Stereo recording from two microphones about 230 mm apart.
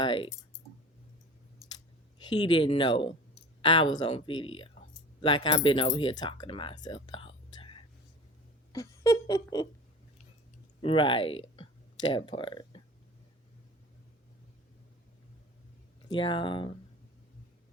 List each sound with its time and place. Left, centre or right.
0.0 s speech: left
2.3 s speech: centre
8.7 s a sound: centre
10.8 s speech: left
16.0 s speech: left